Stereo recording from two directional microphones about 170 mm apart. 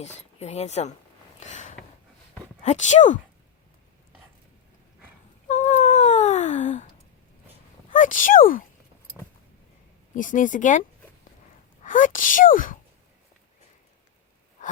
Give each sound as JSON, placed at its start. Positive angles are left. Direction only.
{"t": 0.2, "sound": "speech", "side_deg": 40}
{"t": 1.4, "sound": "a sound", "side_deg": 45}
{"t": 2.6, "sound": "speech", "side_deg": 45}
{"t": 5.5, "sound": "cat", "side_deg": 45}
{"t": 7.9, "sound": "speech", "side_deg": 50}
{"t": 10.2, "sound": "speech", "side_deg": 50}